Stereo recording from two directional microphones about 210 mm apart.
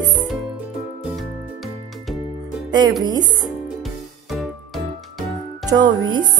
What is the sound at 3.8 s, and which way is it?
Music, centre (ahead or behind).